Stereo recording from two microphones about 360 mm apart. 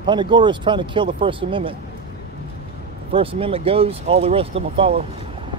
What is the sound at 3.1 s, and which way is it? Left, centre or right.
Speech, centre.